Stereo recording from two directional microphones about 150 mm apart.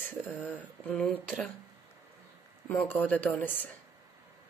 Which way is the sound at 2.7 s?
15° left (ahead or behind).